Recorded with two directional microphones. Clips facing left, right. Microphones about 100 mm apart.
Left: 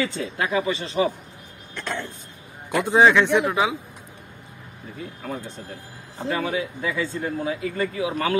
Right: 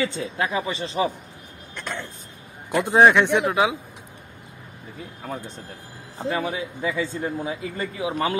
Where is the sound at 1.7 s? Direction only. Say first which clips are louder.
Left 2 dB; 15° right (ahead or behind).